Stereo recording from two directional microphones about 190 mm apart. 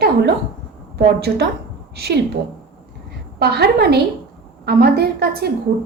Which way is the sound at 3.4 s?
55° right (ahead or behind).